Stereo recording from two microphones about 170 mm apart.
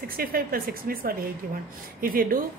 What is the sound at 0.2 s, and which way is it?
A woman's voice, 60° right (ahead or behind).